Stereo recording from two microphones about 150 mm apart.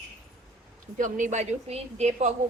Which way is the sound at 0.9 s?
60° right (ahead or behind).